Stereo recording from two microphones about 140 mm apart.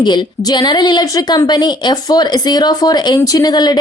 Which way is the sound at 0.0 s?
30° left (ahead or behind).